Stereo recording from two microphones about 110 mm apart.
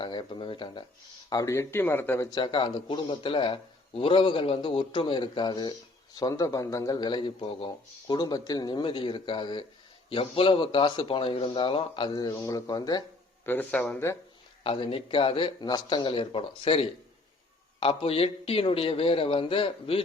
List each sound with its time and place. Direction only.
0.0 s speech: 45° left (ahead or behind)
1.3 s speech: 30° left (ahead or behind)
2.3 s a man's voice: 45° left (ahead or behind)
13.4 s speech: 15° left (ahead or behind)
14.6 s a man's voice: 60° left (ahead or behind)
15.6 s a man's voice: 40° left (ahead or behind)